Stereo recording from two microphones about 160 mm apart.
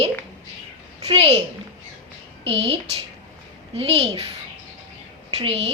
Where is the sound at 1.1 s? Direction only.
35° right (ahead or behind).